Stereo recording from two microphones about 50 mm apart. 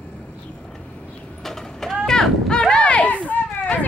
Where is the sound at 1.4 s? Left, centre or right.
Centre.